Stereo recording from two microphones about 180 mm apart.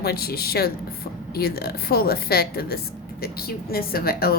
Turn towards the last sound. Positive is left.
turn(degrees=60)  # may be behind; listen again after turning